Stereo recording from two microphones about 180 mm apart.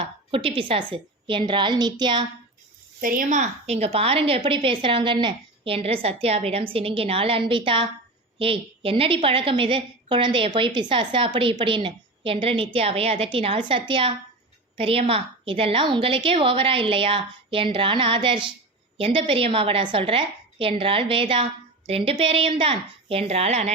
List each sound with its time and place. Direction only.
0.0 s a woman's voice: 30° right (ahead or behind)
3.0 s a woman's voice: 50° right (ahead or behind)